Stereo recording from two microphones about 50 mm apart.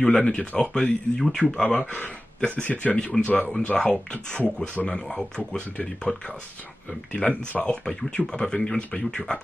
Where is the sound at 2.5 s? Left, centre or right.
Left.